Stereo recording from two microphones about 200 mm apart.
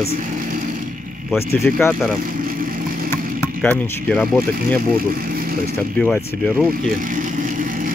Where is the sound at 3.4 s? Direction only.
5° left (ahead or behind).